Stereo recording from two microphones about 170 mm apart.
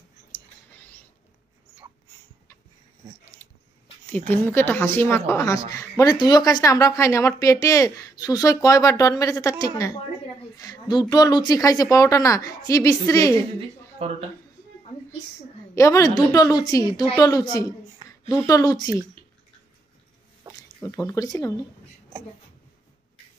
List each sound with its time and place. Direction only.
0.3 s whispering: 15° left (ahead or behind)
3.4 s a sound: 15° left (ahead or behind)
4.5 s a woman's voice: 10° left (ahead or behind)
13.6 s speech: 35° right (ahead or behind)
15.7 s a woman's voice: 20° left (ahead or behind)
21.0 s a woman's voice: 20° left (ahead or behind)